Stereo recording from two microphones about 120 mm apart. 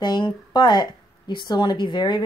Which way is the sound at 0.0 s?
35° left (ahead or behind).